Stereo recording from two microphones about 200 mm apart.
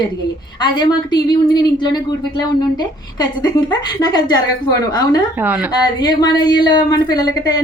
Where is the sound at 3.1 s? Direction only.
20° left (ahead or behind).